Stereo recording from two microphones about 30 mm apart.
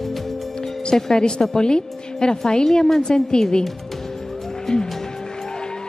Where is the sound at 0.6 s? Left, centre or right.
Left.